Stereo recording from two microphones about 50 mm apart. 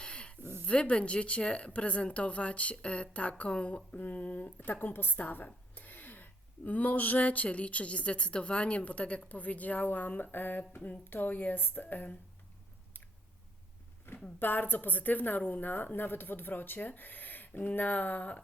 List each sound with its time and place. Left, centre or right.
0.0 s a sound: centre
0.6 s a woman's voice: left
14.3 s a woman's voice: left